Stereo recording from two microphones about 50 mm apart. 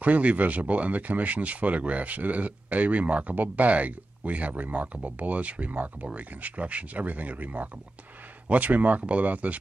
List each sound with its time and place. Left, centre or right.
0.0 s speech: right